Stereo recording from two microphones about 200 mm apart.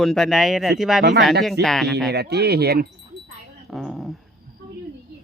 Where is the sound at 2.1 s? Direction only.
55° right (ahead or behind).